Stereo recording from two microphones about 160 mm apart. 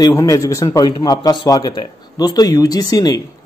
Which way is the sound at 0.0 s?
20° left (ahead or behind).